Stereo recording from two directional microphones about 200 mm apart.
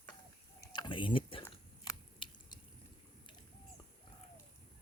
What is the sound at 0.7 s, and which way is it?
Typing, 25° left (ahead or behind).